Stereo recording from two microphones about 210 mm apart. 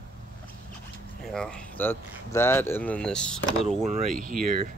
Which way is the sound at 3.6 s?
30° right (ahead or behind).